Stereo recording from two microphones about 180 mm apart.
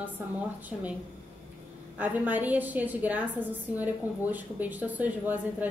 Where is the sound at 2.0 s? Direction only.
10° right (ahead or behind).